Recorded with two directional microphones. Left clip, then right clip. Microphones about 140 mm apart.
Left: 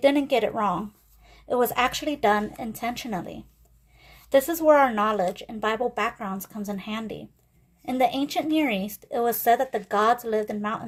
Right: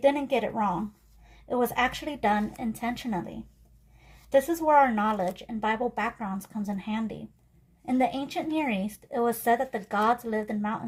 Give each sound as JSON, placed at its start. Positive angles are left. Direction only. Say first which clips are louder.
{"t": 0.0, "sound": "a woman's voice", "louder": "left 3 dB", "side_deg": 45}